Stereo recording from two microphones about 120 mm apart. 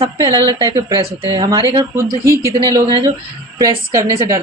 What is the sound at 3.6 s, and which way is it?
Speech, 25° right (ahead or behind).